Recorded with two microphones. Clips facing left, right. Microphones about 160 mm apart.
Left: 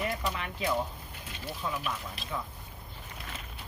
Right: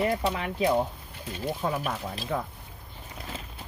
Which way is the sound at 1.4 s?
45° right (ahead or behind).